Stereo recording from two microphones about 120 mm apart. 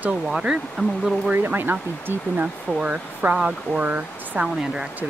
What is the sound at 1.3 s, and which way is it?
Speech, 15° right (ahead or behind).